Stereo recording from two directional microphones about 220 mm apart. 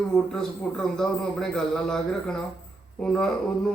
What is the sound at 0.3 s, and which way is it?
A man's voice, 5° left (ahead or behind).